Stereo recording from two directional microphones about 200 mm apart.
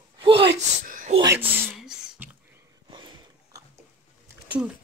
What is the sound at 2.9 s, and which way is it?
Sniff, 25° right (ahead or behind).